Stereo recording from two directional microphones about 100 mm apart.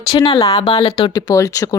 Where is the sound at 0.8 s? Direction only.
50° left (ahead or behind).